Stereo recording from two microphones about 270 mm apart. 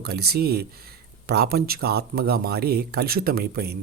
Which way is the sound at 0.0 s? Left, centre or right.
Right.